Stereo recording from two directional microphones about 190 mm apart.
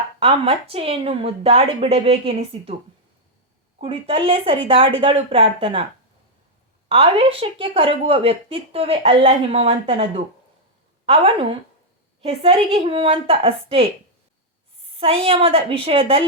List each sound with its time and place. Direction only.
0.2 s speech: 30° right (ahead or behind)
3.8 s a woman's voice: 30° right (ahead or behind)
6.8 s a woman's voice: 30° right (ahead or behind)
14.9 s a woman's voice: 30° right (ahead or behind)